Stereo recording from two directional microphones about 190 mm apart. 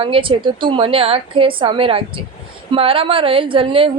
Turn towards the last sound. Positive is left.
turn(degrees=-30)  # may be behind; listen again after turning